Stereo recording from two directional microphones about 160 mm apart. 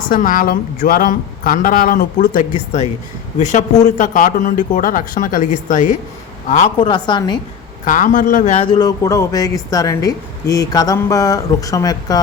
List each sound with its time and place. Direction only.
0.1 s a woman's voice: 60° left (ahead or behind)
6.7 s a woman's voice: 30° left (ahead or behind)
7.9 s a woman's voice: 55° left (ahead or behind)
8.5 s a woman's voice: 30° left (ahead or behind)